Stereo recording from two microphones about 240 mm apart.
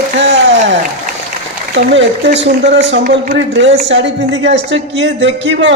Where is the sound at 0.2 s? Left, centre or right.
Right.